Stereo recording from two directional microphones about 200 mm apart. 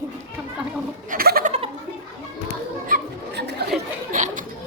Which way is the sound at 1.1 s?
50° right (ahead or behind).